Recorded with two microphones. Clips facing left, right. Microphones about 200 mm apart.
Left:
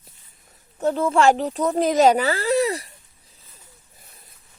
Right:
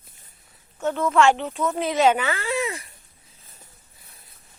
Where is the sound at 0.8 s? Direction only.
30° left (ahead or behind).